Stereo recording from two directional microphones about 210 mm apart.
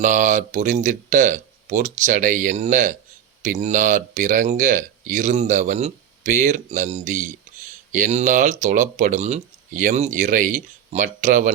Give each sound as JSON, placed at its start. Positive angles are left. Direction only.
{"t": 0.0, "sound": "speech", "side_deg": -35}